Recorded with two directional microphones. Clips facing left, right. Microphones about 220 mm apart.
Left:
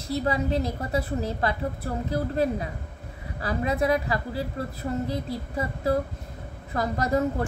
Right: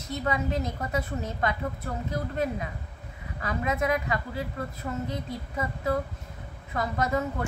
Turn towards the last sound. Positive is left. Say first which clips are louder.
# left 3 dB
turn(degrees=35)  # may be behind; listen again after turning